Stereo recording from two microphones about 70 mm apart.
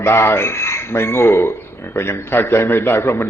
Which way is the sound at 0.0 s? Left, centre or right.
Left.